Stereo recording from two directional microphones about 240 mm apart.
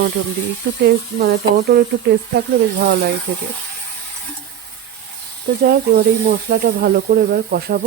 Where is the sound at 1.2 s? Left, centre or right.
Right.